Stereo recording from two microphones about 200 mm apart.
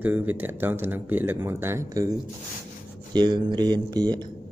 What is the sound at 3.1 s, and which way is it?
Speech, 20° right (ahead or behind).